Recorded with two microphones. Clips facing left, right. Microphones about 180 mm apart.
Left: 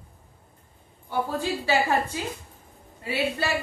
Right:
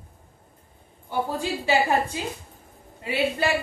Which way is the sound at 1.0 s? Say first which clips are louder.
Even; 15° right (ahead or behind).